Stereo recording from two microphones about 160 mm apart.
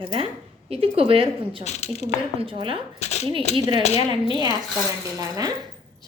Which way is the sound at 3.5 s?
40° left (ahead or behind).